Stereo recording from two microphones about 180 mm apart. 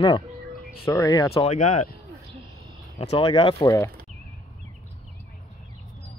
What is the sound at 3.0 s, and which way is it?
Speech, 30° left (ahead or behind).